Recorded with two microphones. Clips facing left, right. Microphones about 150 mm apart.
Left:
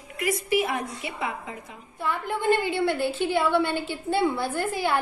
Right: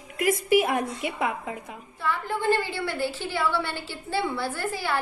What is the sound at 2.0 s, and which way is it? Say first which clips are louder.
A woman's voice: left 1 dB; 15° left (ahead or behind).